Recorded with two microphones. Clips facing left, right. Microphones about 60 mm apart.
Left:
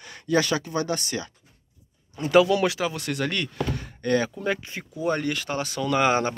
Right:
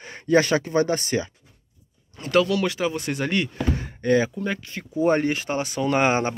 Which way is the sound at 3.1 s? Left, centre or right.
Centre.